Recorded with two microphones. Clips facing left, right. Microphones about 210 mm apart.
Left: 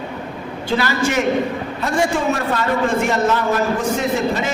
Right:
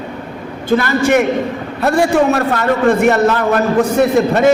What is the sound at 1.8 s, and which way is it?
A man's voice, 65° right (ahead or behind).